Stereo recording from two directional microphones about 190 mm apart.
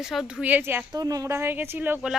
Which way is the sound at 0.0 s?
Centre (ahead or behind).